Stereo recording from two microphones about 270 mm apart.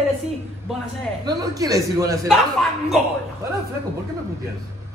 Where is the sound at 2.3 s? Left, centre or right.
Centre.